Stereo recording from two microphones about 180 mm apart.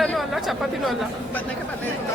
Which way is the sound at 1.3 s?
10° left (ahead or behind).